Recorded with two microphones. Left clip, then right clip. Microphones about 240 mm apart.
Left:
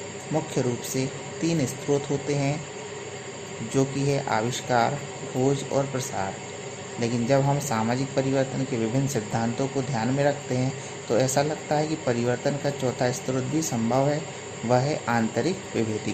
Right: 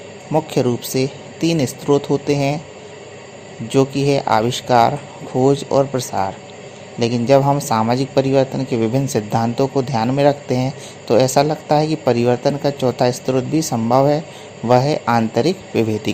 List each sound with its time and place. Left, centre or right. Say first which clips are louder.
0.5 s a man's voice: right 9 dB; right
3.8 s a man's voice: right 10 dB; right